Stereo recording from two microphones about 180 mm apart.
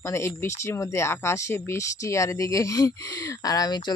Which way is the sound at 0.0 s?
15° left (ahead or behind).